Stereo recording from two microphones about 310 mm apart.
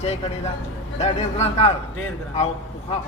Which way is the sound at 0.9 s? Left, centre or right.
Left.